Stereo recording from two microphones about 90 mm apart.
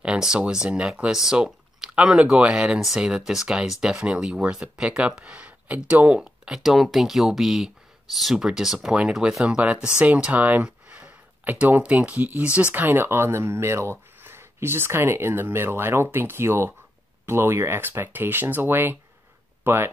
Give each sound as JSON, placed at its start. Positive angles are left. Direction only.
{"t": 0.0, "sound": "speech", "side_deg": -10}
{"t": 9.9, "sound": "a sound", "side_deg": -10}
{"t": 11.6, "sound": "speech", "side_deg": -15}